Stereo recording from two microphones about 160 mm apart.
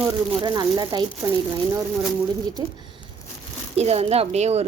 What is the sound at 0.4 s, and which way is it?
Speech, 25° right (ahead or behind).